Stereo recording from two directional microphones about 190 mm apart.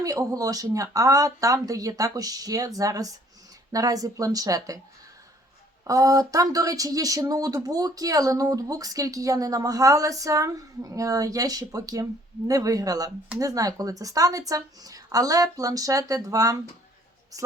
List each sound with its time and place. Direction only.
0.0 s a woman's voice: 20° right (ahead or behind)
5.8 s a woman's voice: 15° right (ahead or behind)